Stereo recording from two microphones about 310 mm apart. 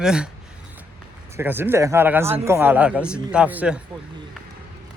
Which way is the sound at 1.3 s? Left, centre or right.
Centre.